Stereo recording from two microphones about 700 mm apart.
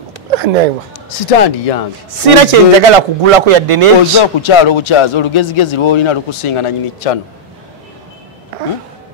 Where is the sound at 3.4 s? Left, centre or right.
Right.